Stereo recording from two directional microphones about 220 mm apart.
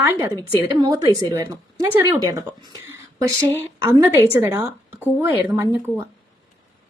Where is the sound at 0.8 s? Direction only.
15° right (ahead or behind).